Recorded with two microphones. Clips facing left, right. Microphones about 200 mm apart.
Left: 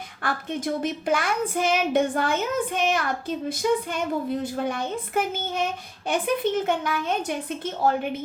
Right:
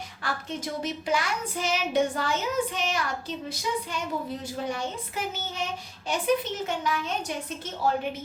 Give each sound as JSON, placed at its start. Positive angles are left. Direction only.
{"t": 0.2, "sound": "a child's voice", "side_deg": 55}